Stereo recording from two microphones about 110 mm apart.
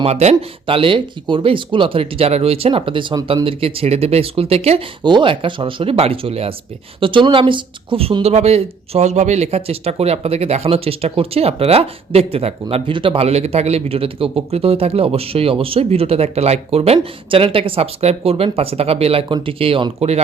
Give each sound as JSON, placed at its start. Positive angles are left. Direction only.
{"t": 0.0, "sound": "speech", "side_deg": -75}
{"t": 0.8, "sound": "a man's voice", "side_deg": -50}
{"t": 5.0, "sound": "speech", "side_deg": -45}
{"t": 7.0, "sound": "speech", "side_deg": -50}
{"t": 8.2, "sound": "speech", "side_deg": -70}
{"t": 12.7, "sound": "a man's voice", "side_deg": -50}